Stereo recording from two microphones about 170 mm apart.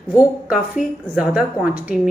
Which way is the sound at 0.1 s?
5° right (ahead or behind).